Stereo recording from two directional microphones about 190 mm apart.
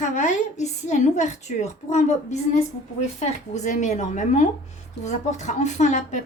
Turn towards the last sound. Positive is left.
turn(degrees=40)  # may be behind; listen again after turning